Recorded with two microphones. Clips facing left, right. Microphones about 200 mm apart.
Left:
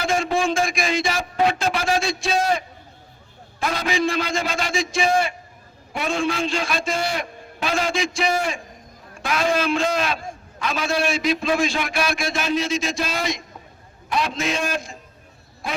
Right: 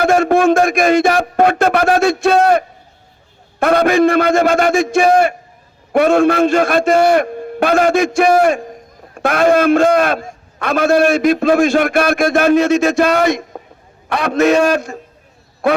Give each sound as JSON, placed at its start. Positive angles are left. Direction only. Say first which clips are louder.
{"t": 0.0, "sound": "a man's voice", "louder": "right 10 dB", "side_deg": -60}